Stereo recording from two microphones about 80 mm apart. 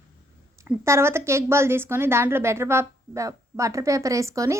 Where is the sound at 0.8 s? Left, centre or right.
Right.